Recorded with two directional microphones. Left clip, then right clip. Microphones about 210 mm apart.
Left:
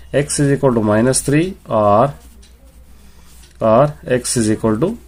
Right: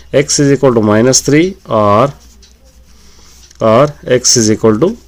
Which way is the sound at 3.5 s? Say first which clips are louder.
Right 4 dB; 40° right (ahead or behind).